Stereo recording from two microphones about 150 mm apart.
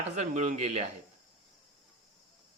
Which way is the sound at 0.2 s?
50° right (ahead or behind).